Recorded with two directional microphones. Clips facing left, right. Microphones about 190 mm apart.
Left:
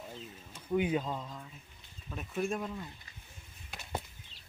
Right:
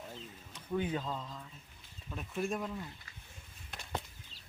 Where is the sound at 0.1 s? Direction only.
10° left (ahead or behind).